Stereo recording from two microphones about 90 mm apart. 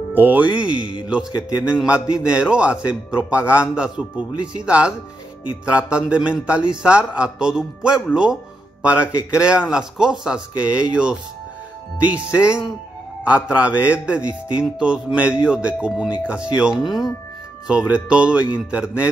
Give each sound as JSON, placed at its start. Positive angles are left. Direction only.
{"t": 0.1, "sound": "a man's voice", "side_deg": -20}
{"t": 17.6, "sound": "a man's voice", "side_deg": -10}